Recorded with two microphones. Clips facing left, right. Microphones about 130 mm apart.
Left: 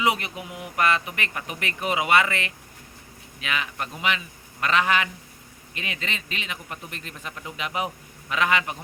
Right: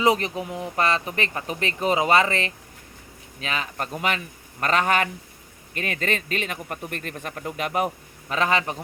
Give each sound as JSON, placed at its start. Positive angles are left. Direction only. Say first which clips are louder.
{"t": 0.0, "sound": "a man's voice", "louder": "right 4 dB", "side_deg": -35}
{"t": 8.3, "sound": "speech", "louder": "right 1 dB", "side_deg": -35}